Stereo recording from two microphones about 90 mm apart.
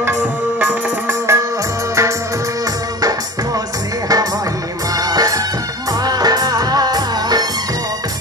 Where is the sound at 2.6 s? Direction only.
45° right (ahead or behind).